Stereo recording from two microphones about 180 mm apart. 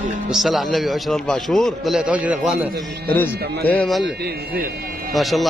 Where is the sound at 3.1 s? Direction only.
10° left (ahead or behind).